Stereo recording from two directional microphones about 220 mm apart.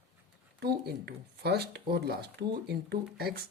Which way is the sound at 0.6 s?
50° right (ahead or behind).